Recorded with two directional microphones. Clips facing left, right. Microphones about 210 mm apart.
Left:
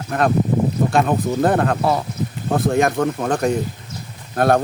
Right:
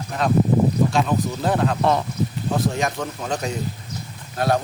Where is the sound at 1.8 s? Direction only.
5° left (ahead or behind).